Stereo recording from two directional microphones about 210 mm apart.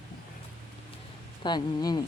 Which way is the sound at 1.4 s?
20° left (ahead or behind).